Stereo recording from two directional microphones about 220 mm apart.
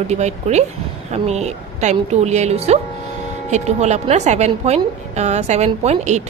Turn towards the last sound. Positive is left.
turn(degrees=-30)  # may be behind; listen again after turning